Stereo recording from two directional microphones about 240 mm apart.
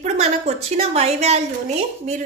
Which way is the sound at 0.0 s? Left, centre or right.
Right.